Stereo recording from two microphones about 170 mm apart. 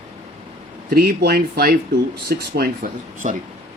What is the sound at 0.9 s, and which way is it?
Speech, 60° right (ahead or behind).